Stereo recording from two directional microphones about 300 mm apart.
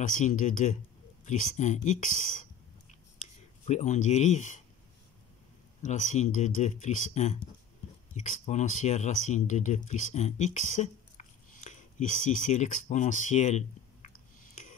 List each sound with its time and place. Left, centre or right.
0.0 s speech: left
2.9 s a sound: left
5.8 s speech: left